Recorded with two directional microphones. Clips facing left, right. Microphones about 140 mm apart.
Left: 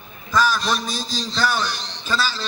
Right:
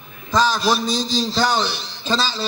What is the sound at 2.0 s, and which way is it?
Speech, 25° right (ahead or behind).